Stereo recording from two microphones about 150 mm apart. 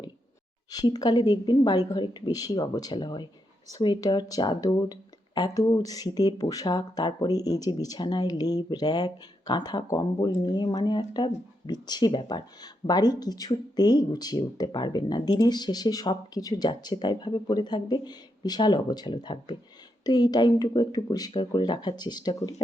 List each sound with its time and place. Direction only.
0.7 s speech: 25° left (ahead or behind)